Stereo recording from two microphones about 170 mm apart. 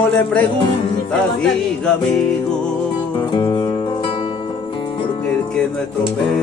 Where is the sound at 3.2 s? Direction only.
30° left (ahead or behind).